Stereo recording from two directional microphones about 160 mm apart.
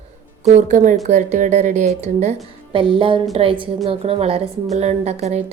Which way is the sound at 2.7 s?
35° right (ahead or behind).